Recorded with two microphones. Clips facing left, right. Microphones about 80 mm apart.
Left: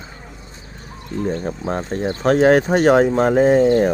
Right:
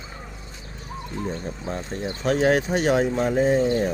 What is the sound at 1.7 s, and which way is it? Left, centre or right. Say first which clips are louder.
Speech: left 7 dB; left.